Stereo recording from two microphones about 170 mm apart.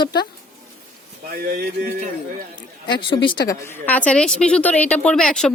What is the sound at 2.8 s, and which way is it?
Speech, 25° left (ahead or behind).